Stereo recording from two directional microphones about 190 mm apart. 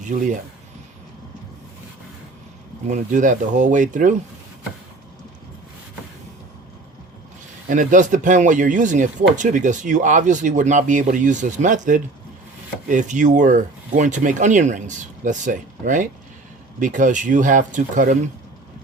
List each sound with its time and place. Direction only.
2.8 s speech: 40° right (ahead or behind)
7.7 s speech: 40° right (ahead or behind)